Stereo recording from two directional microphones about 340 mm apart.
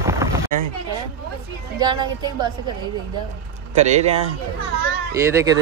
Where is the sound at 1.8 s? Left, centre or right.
Centre.